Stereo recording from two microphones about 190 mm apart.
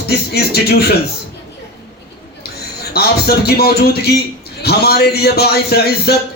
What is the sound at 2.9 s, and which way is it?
Speech, 55° left (ahead or behind).